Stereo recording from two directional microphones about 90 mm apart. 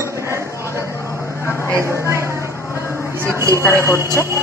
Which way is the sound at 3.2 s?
35° right (ahead or behind).